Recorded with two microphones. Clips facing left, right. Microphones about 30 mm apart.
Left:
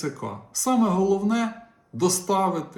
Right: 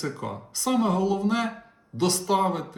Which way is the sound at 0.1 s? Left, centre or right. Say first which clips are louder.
Even; right.